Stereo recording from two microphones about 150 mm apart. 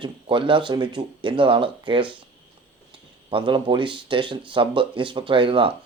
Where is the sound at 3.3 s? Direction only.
30° right (ahead or behind).